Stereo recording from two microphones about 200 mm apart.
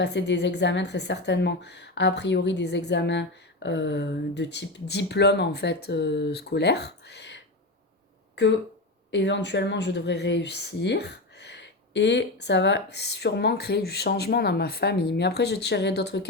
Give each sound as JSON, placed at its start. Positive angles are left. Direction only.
{"t": 0.0, "sound": "speech", "side_deg": 60}
{"t": 9.0, "sound": "speech", "side_deg": 60}